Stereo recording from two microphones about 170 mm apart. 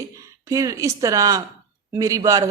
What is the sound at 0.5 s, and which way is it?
A man's voice, 20° right (ahead or behind).